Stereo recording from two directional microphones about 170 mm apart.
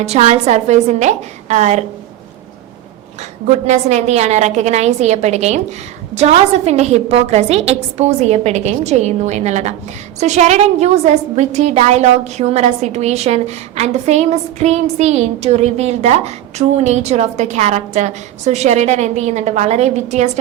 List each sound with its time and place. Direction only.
0.0 s a woman's voice: 40° right (ahead or behind)
3.4 s a woman's voice: 40° right (ahead or behind)